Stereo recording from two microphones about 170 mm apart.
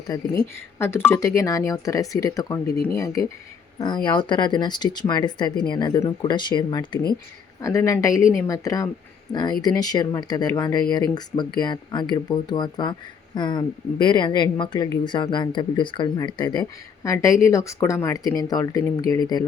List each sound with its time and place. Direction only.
0.1 s speech: 15° left (ahead or behind)